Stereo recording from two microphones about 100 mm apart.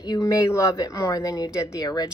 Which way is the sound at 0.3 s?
30° left (ahead or behind).